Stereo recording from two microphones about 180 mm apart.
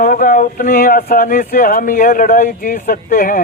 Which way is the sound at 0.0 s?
50° left (ahead or behind).